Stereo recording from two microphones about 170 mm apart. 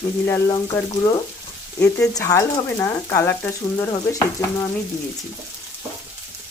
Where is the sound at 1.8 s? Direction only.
20° left (ahead or behind).